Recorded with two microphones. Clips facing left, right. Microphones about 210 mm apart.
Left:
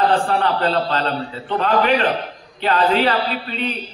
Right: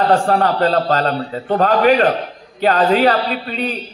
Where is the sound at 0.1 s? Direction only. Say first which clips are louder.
Right 4 dB; 45° right (ahead or behind).